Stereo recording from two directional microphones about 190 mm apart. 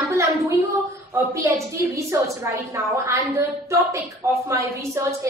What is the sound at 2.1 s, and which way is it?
Speech, 15° right (ahead or behind).